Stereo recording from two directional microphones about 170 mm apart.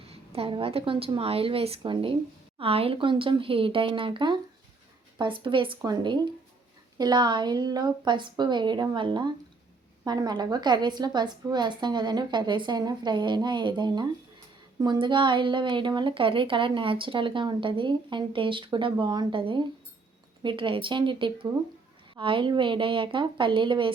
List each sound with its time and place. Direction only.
0.1 s a woman's voice: 35° right (ahead or behind)